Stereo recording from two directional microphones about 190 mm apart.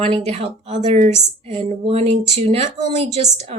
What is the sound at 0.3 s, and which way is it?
Speech, 35° right (ahead or behind).